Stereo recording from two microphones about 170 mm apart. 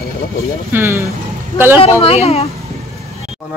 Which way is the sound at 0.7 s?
15° right (ahead or behind).